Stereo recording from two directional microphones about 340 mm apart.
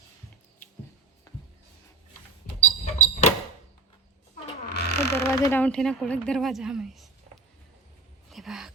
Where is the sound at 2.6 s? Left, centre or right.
Left.